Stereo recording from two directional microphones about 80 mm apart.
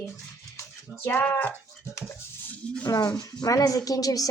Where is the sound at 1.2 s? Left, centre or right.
Left.